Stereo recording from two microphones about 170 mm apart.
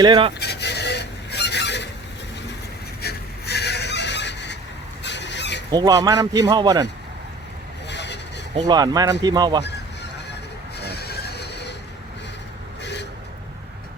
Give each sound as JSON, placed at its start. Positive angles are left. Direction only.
{"t": 0.0, "sound": "a man's voice", "side_deg": -30}
{"t": 0.3, "sound": "honk", "side_deg": 80}
{"t": 3.0, "sound": "fowl", "side_deg": 70}
{"t": 5.7, "sound": "a man's voice", "side_deg": -20}
{"t": 7.9, "sound": "vehicle", "side_deg": 90}
{"t": 8.6, "sound": "a man's voice", "side_deg": -20}
{"t": 10.8, "sound": "neigh", "side_deg": 75}
{"t": 12.8, "sound": "a sound", "side_deg": 90}